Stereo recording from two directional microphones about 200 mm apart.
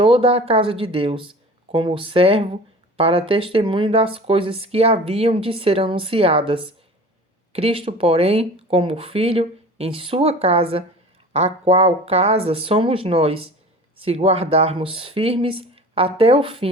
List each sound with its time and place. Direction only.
0.0 s speech: 30° right (ahead or behind)